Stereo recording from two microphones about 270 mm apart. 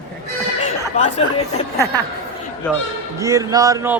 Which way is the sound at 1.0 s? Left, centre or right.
Left.